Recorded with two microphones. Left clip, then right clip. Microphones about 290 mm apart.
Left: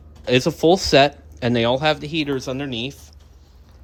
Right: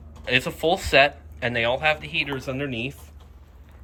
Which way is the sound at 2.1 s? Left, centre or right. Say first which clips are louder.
Left 3 dB; centre.